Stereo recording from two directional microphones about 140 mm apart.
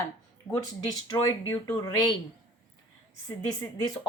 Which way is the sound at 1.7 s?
35° left (ahead or behind).